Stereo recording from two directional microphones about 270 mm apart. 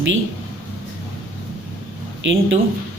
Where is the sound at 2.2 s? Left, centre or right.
Right.